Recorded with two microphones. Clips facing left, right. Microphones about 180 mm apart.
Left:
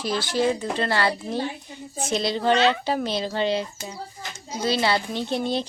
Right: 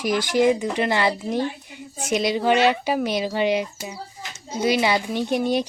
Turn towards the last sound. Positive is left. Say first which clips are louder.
# right 4 dB
turn(degrees=-15)  # may be behind; listen again after turning